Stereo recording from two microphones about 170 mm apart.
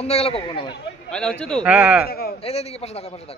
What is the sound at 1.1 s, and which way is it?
Speech, 5° left (ahead or behind).